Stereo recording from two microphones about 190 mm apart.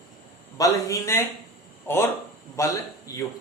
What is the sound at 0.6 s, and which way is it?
Speech, 15° left (ahead or behind).